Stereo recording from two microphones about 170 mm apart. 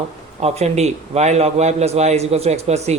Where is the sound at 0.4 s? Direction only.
40° right (ahead or behind).